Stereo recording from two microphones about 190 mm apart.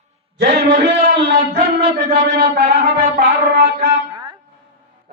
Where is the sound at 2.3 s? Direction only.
65° right (ahead or behind).